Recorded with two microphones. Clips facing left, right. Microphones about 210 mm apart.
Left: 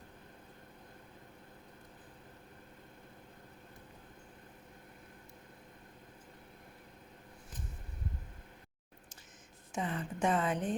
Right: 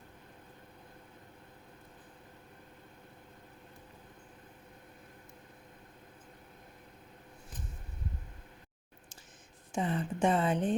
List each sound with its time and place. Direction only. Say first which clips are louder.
9.7 s a woman's voice: right 4 dB; 30° right (ahead or behind)